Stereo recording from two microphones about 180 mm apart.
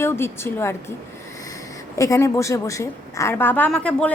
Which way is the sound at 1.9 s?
15° left (ahead or behind).